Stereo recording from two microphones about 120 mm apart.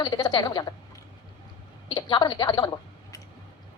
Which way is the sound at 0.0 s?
35° left (ahead or behind).